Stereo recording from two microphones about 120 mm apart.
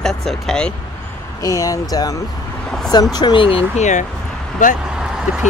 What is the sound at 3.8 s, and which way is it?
Speech, 90° left.